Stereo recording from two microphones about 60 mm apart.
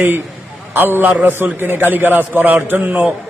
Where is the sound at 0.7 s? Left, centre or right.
Right.